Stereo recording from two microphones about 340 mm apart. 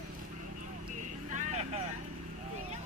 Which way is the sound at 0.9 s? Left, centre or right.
Right.